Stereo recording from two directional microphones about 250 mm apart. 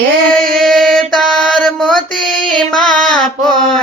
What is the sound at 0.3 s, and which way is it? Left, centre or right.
Mantra, centre.